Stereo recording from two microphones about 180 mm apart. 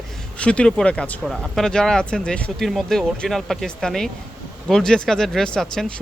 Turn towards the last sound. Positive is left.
turn(degrees=5)  # may be behind; listen again after turning